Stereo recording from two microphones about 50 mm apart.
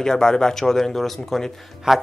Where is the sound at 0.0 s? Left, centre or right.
Centre.